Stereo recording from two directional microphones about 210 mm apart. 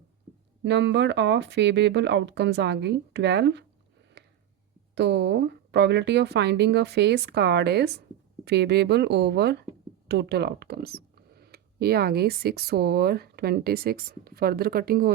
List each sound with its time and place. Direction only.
0.6 s speech: 55° right (ahead or behind)
4.2 s a sound: 50° right (ahead or behind)
4.9 s speech: 55° right (ahead or behind)